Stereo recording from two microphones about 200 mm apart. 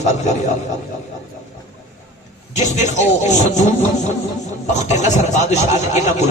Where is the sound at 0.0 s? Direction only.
35° left (ahead or behind).